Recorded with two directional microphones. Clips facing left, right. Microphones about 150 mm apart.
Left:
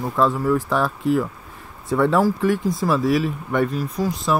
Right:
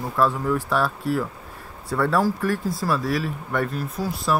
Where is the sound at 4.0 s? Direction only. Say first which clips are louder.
Left 5 dB; 15° left (ahead or behind).